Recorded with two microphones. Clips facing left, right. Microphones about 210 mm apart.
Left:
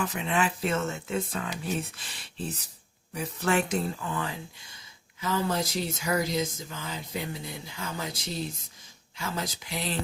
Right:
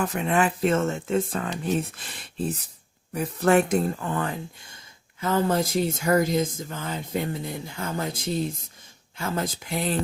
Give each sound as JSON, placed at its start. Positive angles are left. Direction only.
{"t": 0.0, "sound": "speech", "side_deg": -50}